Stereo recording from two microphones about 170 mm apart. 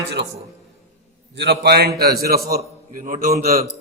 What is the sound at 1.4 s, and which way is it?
A man's voice, 75° right (ahead or behind).